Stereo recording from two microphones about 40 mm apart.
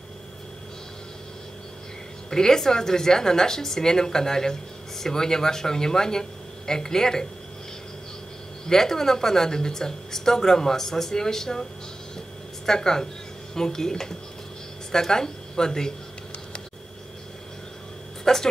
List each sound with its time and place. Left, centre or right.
2.2 s a woman's voice: centre
8.6 s a woman's voice: centre
12.6 s a woman's voice: centre
18.2 s speech: centre